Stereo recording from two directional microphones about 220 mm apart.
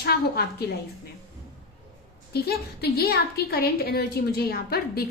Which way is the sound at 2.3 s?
45° left (ahead or behind).